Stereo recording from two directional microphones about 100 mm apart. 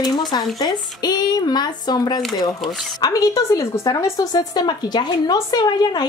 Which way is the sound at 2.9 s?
40° left (ahead or behind).